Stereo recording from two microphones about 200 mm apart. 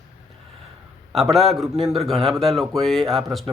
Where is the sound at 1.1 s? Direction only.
Centre (ahead or behind).